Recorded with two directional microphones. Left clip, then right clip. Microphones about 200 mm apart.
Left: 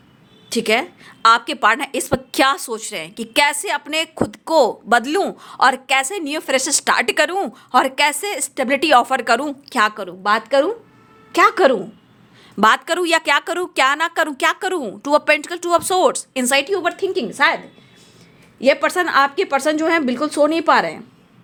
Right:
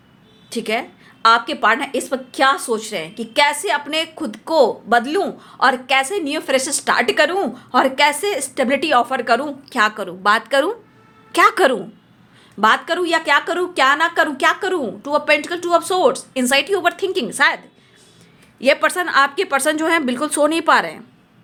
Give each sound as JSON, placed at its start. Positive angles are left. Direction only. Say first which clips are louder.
{"t": 0.5, "sound": "speech", "louder": "left 4 dB", "side_deg": 25}
{"t": 12.5, "sound": "speech", "louder": "left 1 dB", "side_deg": 35}
{"t": 16.7, "sound": "a woman's voice", "louder": "right 1 dB", "side_deg": 10}
{"t": 18.6, "sound": "speech", "louder": "even", "side_deg": 15}